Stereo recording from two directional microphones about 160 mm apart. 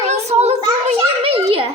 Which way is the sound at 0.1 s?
40° right (ahead or behind).